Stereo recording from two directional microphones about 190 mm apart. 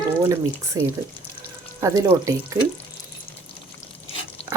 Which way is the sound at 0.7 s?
20° right (ahead or behind).